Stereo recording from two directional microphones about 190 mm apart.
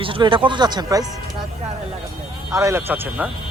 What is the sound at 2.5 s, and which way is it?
Speech, 15° right (ahead or behind).